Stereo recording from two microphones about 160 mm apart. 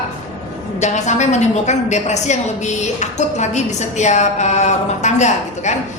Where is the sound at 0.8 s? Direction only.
45° left (ahead or behind).